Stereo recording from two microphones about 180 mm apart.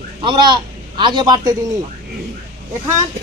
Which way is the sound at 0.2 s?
25° right (ahead or behind).